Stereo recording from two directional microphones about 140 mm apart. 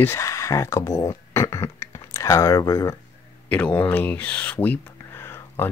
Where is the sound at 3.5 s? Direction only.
10° left (ahead or behind).